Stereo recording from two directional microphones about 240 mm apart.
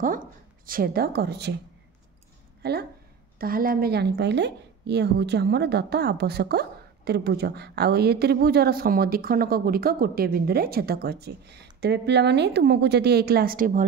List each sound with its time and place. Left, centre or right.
0.0 s a woman's voice: right
2.6 s a woman's voice: right